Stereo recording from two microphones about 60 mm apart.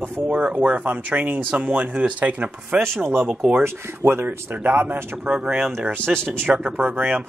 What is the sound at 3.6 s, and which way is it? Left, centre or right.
Speech, right.